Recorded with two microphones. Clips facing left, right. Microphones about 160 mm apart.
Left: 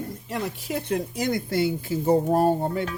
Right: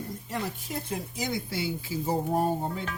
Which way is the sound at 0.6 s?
80° left.